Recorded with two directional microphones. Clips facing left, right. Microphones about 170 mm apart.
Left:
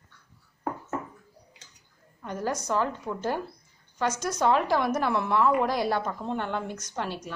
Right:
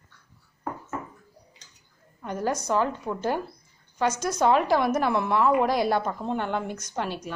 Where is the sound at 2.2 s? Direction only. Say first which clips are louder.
Right 3 dB; 15° right (ahead or behind).